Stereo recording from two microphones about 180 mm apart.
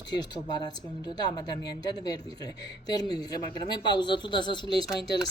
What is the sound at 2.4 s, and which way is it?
A woman's voice, 20° left (ahead or behind).